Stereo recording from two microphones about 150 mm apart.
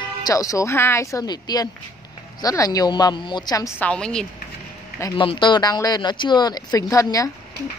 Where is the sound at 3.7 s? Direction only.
5° left (ahead or behind).